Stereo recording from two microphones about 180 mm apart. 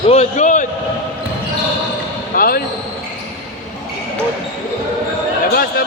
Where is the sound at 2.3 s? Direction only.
55° left (ahead or behind).